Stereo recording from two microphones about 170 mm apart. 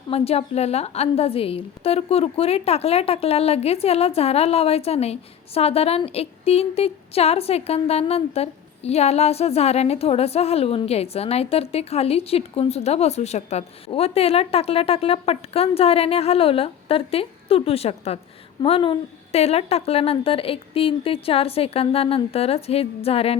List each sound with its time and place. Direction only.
0.1 s a woman's voice: 35° left (ahead or behind)